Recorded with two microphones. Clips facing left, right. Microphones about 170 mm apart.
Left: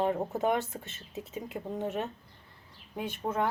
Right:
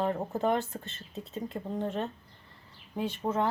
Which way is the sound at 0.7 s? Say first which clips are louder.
Even; 10° left (ahead or behind).